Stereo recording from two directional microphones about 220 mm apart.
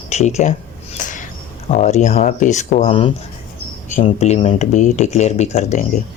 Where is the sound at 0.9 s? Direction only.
35° left (ahead or behind).